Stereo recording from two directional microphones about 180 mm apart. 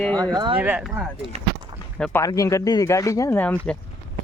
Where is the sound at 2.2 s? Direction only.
20° left (ahead or behind).